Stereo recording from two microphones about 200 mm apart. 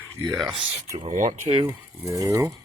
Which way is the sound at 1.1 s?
40° right (ahead or behind).